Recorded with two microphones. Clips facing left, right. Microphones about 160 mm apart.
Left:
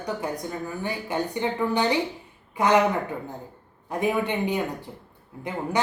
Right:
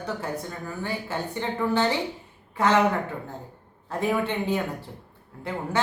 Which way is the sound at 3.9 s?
15° left (ahead or behind).